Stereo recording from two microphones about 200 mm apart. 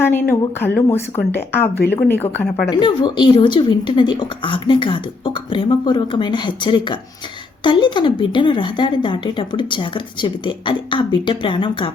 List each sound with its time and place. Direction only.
0.1 s speech: 10° left (ahead or behind)
2.6 s a woman's voice: 25° left (ahead or behind)